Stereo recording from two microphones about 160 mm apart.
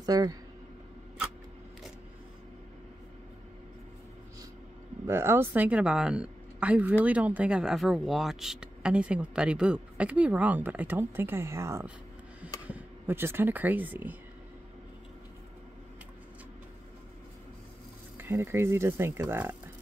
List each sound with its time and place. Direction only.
0.0 s speech: 25° right (ahead or behind)
5.0 s speech: 15° right (ahead or behind)
18.1 s speech: 15° right (ahead or behind)